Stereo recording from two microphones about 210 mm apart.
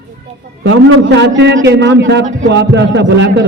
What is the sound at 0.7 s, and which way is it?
A man's voice, 60° right (ahead or behind).